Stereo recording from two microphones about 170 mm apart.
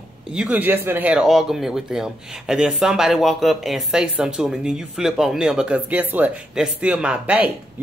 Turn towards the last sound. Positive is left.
turn(degrees=-10)  # may be behind; listen again after turning